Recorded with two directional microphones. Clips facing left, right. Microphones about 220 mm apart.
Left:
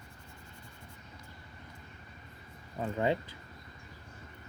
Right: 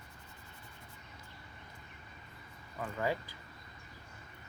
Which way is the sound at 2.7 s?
25° left (ahead or behind).